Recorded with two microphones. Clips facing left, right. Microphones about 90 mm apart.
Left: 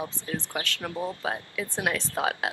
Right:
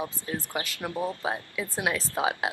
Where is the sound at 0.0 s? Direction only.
15° right (ahead or behind).